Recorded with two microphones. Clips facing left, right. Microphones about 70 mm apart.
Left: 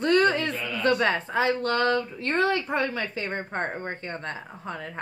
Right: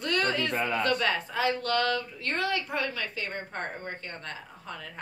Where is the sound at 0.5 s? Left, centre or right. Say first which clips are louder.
Right 3 dB; right.